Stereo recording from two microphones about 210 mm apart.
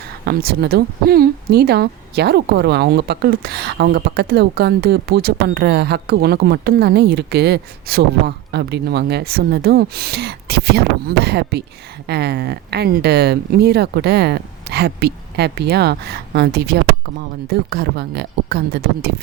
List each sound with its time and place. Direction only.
0.3 s speech: 50° right (ahead or behind)